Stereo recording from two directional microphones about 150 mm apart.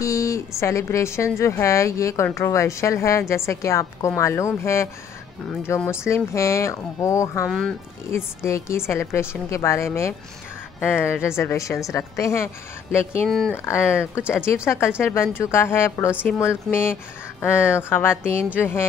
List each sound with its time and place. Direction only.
0.0 s a woman's voice: 20° left (ahead or behind)
7.4 s speech: 5° left (ahead or behind)
8.1 s a woman's voice: 15° left (ahead or behind)
13.3 s speech: 5° left (ahead or behind)
13.7 s a woman's voice: 15° left (ahead or behind)